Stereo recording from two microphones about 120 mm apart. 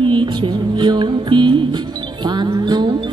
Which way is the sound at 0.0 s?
40° right (ahead or behind).